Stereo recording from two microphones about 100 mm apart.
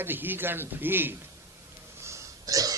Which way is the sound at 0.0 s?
20° right (ahead or behind).